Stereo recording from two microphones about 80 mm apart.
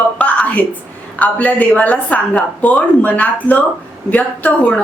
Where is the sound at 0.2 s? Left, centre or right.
Centre.